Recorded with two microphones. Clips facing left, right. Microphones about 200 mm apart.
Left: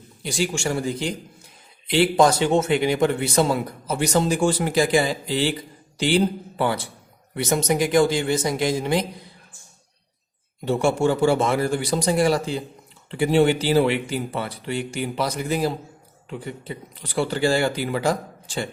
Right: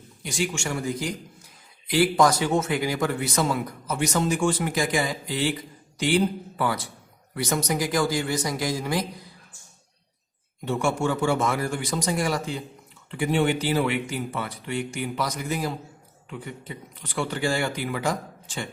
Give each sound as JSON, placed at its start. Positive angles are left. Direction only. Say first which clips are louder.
{"t": 0.2, "sound": "a man's voice", "louder": "left 4 dB", "side_deg": 35}
{"t": 10.7, "sound": "speech", "louder": "left 5 dB", "side_deg": 35}